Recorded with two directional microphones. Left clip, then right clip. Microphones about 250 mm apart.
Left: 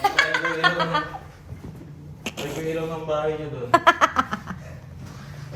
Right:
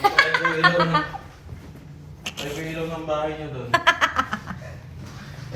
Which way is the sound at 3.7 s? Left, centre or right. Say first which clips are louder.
Left 2 dB; left.